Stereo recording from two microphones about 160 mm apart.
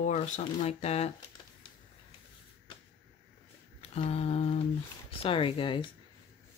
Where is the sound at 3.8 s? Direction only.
40° left (ahead or behind).